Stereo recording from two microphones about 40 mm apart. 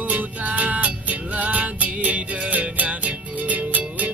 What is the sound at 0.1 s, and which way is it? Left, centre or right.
Music, right.